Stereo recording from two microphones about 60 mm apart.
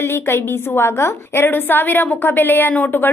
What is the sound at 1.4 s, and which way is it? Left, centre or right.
A woman's voice, left.